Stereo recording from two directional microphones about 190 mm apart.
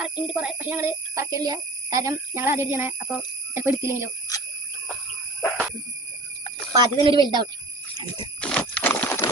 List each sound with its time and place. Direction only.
0.0 s a child's voice: 5° right (ahead or behind)
6.7 s speech: 25° right (ahead or behind)
8.4 s clip-clop: 5° left (ahead or behind)